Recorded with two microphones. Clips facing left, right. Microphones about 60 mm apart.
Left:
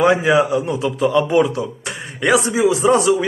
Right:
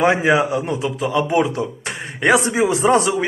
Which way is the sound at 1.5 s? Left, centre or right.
Right.